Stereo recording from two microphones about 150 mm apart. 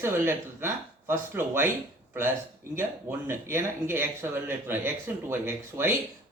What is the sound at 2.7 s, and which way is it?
Speech, 15° right (ahead or behind).